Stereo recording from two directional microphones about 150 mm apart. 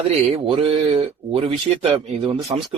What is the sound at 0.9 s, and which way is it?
A man's voice, 40° right (ahead or behind).